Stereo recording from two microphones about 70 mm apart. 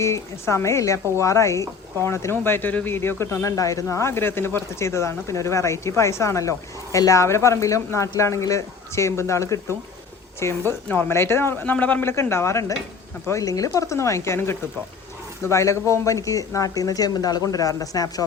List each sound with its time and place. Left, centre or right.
0.0 s speech: left
10.7 s speech: left
11.6 s speech: left
12.0 s speech: left